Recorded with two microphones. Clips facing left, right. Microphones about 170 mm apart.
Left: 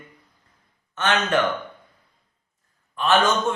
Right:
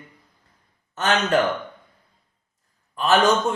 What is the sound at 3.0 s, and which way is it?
Speech, 40° right (ahead or behind).